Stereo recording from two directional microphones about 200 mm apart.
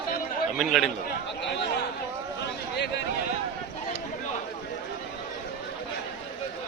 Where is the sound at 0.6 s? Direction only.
Centre (ahead or behind).